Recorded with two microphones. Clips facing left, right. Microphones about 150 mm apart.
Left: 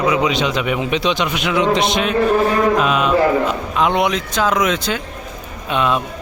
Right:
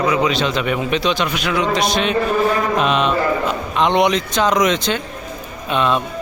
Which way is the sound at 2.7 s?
5° left (ahead or behind).